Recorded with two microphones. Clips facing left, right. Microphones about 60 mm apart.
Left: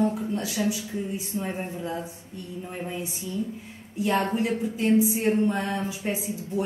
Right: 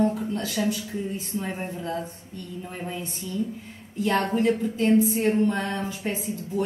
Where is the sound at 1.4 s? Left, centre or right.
Centre.